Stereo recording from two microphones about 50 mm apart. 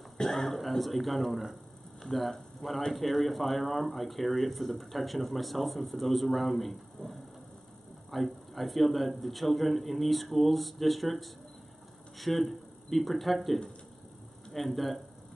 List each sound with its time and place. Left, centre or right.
0.2 s speech: centre